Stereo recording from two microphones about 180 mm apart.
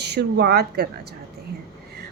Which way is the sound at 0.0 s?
65° right (ahead or behind).